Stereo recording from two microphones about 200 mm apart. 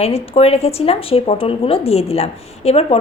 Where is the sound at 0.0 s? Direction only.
30° left (ahead or behind).